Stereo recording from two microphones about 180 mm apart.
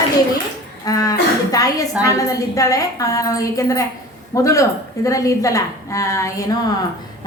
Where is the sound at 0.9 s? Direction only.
20° left (ahead or behind).